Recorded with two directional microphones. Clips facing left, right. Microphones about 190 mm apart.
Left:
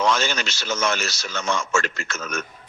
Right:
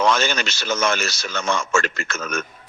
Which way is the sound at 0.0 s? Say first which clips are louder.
Right 2 dB; 60° right (ahead or behind).